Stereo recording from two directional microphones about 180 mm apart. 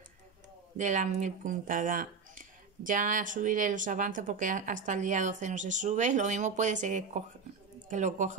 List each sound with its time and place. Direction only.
0.7 s speech: 45° right (ahead or behind)